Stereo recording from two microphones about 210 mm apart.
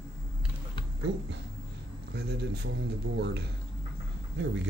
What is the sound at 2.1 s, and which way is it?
Speech, 50° right (ahead or behind).